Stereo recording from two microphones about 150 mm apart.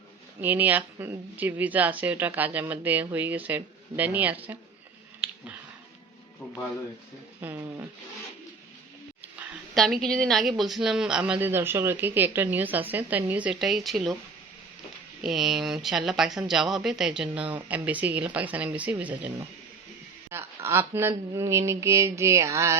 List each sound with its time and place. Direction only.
0.4 s a woman's voice: 10° right (ahead or behind)
7.4 s a woman's voice: 15° right (ahead or behind)
9.7 s a woman's voice: centre (ahead or behind)
15.2 s speech: 5° right (ahead or behind)
20.6 s speech: 15° right (ahead or behind)